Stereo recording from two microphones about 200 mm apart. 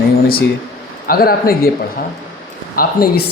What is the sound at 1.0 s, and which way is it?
Speech, 45° left (ahead or behind).